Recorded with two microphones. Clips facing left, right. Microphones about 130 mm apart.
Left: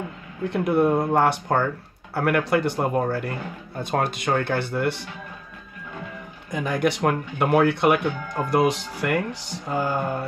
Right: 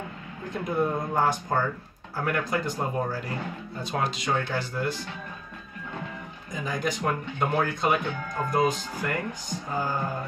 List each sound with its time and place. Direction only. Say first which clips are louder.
0.5 s a man's voice: left 7 dB; 70° left (ahead or behind)
6.5 s speech: left 7 dB; 70° left (ahead or behind)